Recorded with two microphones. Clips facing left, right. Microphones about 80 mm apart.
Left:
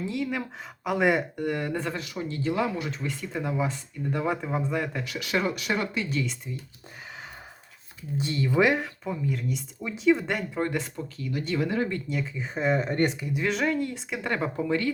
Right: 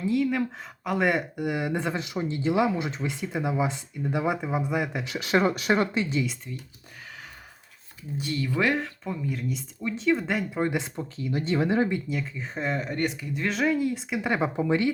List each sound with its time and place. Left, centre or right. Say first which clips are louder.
0.0 s speech: right 5 dB; centre
5.0 s speech: right 4 dB; right
6.5 s speech: left 1 dB; centre
8.2 s speech: left 3 dB; left
9.2 s speech: left 1 dB; centre
10.6 s speech: right 1 dB; centre
10.9 s speech: right 2 dB; right
11.9 s speech: right 1 dB; centre
12.9 s speech: left 3 dB; left
13.4 s speech: right 2 dB; centre